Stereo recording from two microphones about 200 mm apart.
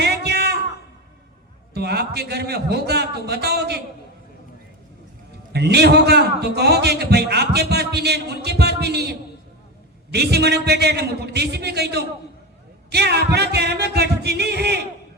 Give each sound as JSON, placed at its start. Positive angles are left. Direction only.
{"t": 0.0, "sound": "a sound", "side_deg": -55}
{"t": 1.7, "sound": "a man's voice", "side_deg": -55}
{"t": 5.5, "sound": "a man's voice", "side_deg": -55}